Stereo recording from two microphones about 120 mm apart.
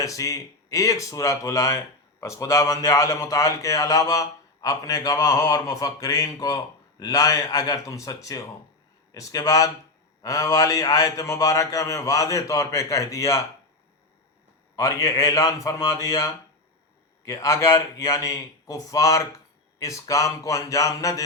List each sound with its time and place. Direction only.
0.0 s speech: 25° left (ahead or behind)
14.8 s speech: 25° left (ahead or behind)